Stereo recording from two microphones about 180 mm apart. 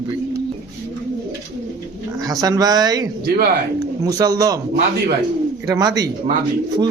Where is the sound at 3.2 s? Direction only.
60° right (ahead or behind).